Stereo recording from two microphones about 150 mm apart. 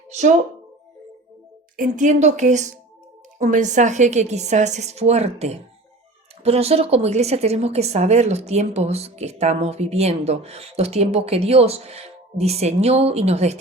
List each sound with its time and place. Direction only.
0.1 s a woman's voice: 50° right (ahead or behind)
1.7 s a woman's voice: 60° right (ahead or behind); by 13.6 s 45° right (ahead or behind)